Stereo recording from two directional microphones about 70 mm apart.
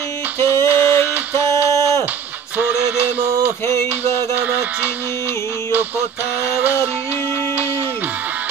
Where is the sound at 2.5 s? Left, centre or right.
Right.